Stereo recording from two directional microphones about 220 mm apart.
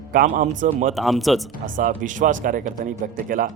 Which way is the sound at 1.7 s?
35° right (ahead or behind).